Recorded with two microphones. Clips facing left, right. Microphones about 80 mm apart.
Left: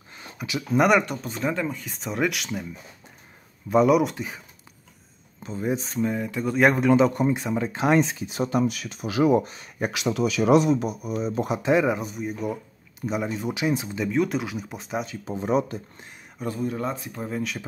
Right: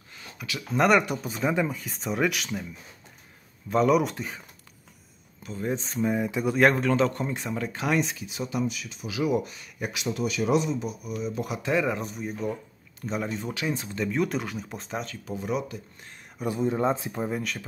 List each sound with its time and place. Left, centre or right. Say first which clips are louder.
0.1 s a sound: left 5 dB; left
0.7 s speech: left 2 dB; centre
3.7 s speech: left 3 dB; centre
5.4 s speech: left 3 dB; centre
6.0 s speech: right 2 dB; centre
6.5 s speech: left 3 dB; centre; by 9.9 s left
9.9 s speech: left 4 dB; left
11.0 s speech: left 5 dB; left; by 12.0 s centre
12.0 s speech: left 2 dB; centre
14.0 s speech: left 2 dB; centre
15.2 s speech: left 7 dB; left
16.5 s speech: right 4 dB; right
17.3 s speech: left 1 dB; centre